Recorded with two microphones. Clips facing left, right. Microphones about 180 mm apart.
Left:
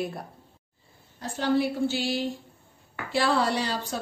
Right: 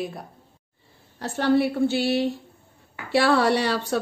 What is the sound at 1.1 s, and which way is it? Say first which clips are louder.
Speech: right 4 dB; 70° right (ahead or behind).